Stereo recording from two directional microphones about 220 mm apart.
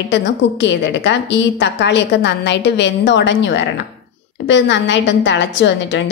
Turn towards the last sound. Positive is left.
turn(degrees=55)  # may be behind; listen again after turning